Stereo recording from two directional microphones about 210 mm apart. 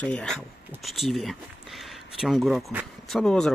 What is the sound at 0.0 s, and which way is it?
Speech, 5° left (ahead or behind).